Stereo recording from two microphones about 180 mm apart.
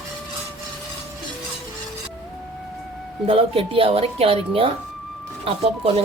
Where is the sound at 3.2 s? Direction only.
30° right (ahead or behind).